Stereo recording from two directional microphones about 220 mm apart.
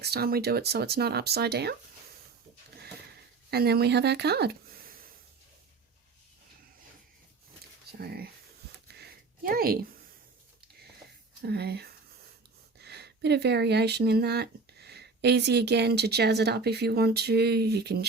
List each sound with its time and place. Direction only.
0.0 s speech: 45° right (ahead or behind)
3.5 s speech: 45° right (ahead or behind)
7.9 s a sound: 45° right (ahead or behind)
11.4 s speech: 45° right (ahead or behind)